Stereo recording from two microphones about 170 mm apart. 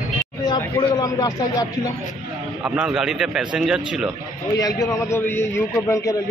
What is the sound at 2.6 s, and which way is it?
A man's voice, 5° right (ahead or behind).